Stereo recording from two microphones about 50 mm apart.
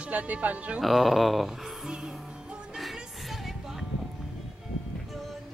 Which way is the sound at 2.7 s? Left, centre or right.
Centre.